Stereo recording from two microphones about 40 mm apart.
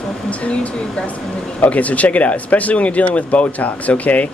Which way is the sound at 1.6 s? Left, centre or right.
Left.